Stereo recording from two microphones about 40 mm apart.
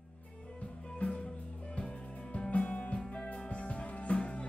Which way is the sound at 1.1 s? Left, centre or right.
Left.